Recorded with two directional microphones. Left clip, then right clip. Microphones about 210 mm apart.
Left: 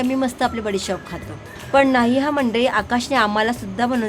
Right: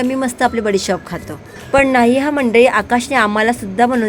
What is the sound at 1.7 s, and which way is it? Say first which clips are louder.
A woman's voice: right 4 dB; 15° right (ahead or behind).